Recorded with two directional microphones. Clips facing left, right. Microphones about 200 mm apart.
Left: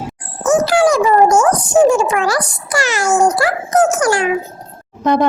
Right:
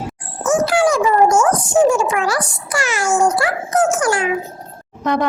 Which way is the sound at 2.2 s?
40° left (ahead or behind).